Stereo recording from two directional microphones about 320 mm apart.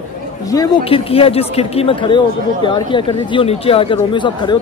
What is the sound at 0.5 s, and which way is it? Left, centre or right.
Speech, centre.